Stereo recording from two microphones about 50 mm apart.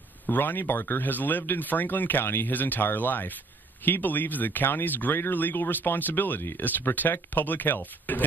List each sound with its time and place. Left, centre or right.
0.3 s speech: left